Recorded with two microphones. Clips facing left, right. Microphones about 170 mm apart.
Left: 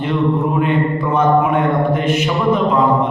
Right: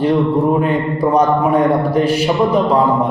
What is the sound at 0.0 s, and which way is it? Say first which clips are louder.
Music: right 3 dB; 35° right (ahead or behind).